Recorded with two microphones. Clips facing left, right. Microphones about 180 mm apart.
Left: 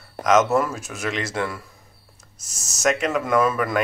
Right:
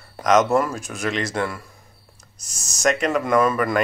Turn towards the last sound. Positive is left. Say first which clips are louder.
# right 1 dB
turn(degrees=5)  # may be behind; listen again after turning